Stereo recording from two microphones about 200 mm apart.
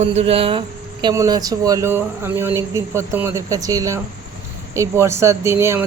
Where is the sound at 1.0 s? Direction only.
15° right (ahead or behind).